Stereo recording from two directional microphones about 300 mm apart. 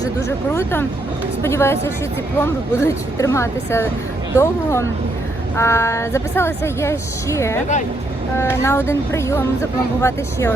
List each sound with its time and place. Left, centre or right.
0.3 s a woman's voice: centre